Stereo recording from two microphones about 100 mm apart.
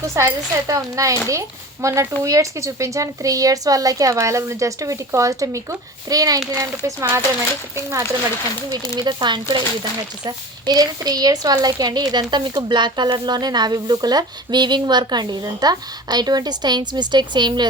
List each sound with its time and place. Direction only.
0.1 s speech: 30° right (ahead or behind)
9.0 s a woman's voice: 50° right (ahead or behind)